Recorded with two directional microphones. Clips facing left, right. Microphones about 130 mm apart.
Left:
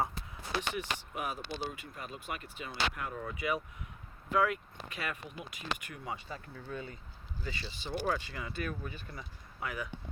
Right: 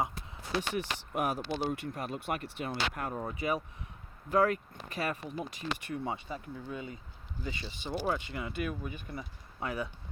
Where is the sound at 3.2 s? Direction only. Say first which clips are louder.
Right 2 dB; 30° right (ahead or behind).